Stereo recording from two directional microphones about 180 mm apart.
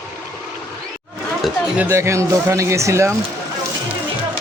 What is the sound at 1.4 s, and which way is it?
Speech, 10° right (ahead or behind).